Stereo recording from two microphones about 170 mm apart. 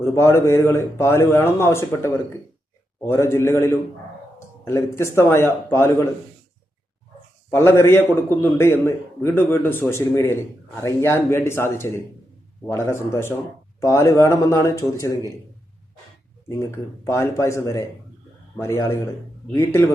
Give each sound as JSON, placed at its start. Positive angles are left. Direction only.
{"t": 0.0, "sound": "a man's voice", "side_deg": 15}
{"t": 7.5, "sound": "a man's voice", "side_deg": 15}
{"t": 16.5, "sound": "a man's voice", "side_deg": 20}